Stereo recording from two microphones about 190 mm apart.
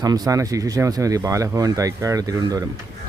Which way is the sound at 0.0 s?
20° right (ahead or behind).